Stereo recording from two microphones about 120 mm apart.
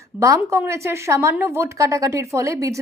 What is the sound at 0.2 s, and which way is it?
A woman's voice, 25° right (ahead or behind).